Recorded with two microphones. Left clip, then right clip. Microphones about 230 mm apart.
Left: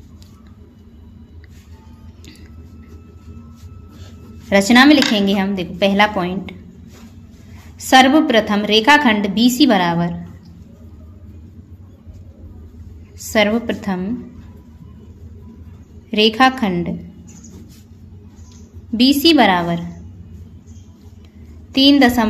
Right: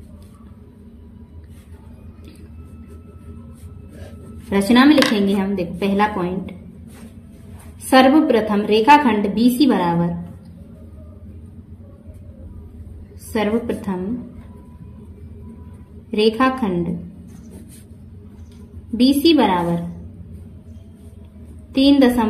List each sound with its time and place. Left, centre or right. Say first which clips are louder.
4.5 s speech: left 4 dB; left
7.9 s a woman's voice: left 2 dB; left
13.3 s a woman's voice: left 5 dB; left
16.1 s a woman's voice: left 4 dB; left
18.9 s a woman's voice: left 3 dB; left
21.7 s a woman's voice: left 2 dB; left